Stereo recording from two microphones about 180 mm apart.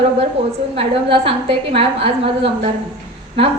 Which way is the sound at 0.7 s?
30° right (ahead or behind).